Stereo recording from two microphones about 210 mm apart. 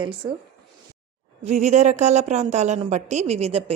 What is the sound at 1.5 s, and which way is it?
A woman's voice, 35° right (ahead or behind).